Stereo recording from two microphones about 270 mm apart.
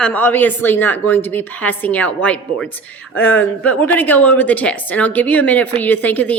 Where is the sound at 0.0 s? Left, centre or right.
Centre.